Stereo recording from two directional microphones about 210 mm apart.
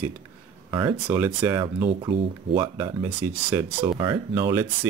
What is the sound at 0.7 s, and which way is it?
Speech, 20° right (ahead or behind).